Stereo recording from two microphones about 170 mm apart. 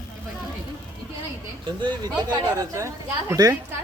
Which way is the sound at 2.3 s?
20° right (ahead or behind).